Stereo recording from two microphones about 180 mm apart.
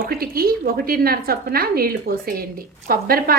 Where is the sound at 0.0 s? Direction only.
55° right (ahead or behind).